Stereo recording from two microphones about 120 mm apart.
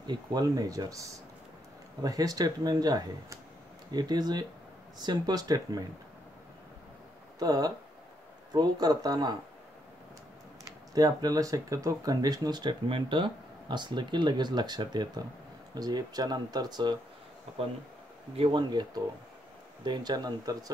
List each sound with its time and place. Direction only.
0.0 s speech: 35° right (ahead or behind)
7.3 s speech: 30° right (ahead or behind)
11.0 s speech: 30° right (ahead or behind)
18.3 s speech: 50° right (ahead or behind)
18.6 s speech: 35° right (ahead or behind)